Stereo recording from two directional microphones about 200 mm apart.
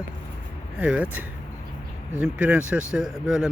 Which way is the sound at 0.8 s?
5° right (ahead or behind).